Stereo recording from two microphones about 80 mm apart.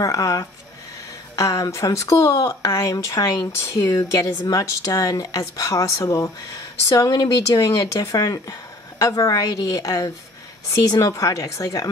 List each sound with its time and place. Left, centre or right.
0.0 s speech: left
6.9 s a woman's voice: left